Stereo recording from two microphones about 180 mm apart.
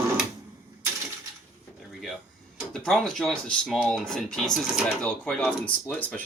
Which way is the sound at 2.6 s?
Centre (ahead or behind).